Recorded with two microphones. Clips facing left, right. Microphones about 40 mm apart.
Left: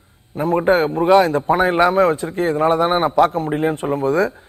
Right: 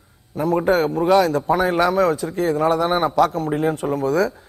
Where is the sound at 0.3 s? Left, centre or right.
Left.